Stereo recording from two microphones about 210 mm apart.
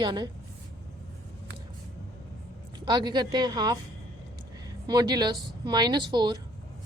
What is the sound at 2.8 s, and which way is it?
A woman's voice, 20° right (ahead or behind).